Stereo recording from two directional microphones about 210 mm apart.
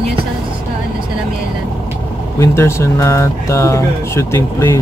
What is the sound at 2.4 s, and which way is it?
Speech, 10° left (ahead or behind).